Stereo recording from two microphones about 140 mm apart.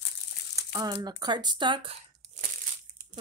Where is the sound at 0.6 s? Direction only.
30° right (ahead or behind).